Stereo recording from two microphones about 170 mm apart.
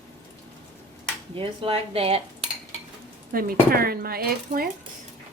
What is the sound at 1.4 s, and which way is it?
Speech, 35° right (ahead or behind).